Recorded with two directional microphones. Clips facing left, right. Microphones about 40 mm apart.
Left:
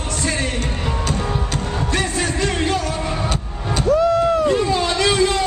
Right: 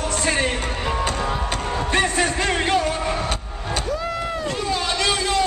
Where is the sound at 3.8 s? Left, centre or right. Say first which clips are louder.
Left 12 dB; left.